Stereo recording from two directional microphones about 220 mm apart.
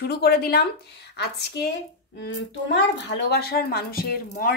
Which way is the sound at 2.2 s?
55° left (ahead or behind).